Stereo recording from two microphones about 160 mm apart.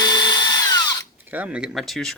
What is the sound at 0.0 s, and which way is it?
Drill, 25° left (ahead or behind).